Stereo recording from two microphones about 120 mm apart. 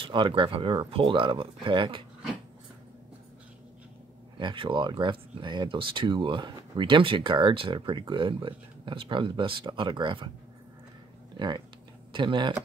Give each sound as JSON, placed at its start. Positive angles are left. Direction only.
{"t": 0.0, "sound": "speech", "side_deg": -45}
{"t": 4.4, "sound": "speech", "side_deg": -40}
{"t": 11.3, "sound": "speech", "side_deg": -40}